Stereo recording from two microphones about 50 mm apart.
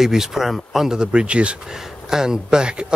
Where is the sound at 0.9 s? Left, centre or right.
Right.